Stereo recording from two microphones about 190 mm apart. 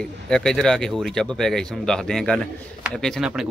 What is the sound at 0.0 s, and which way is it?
Speech, 5° left (ahead or behind).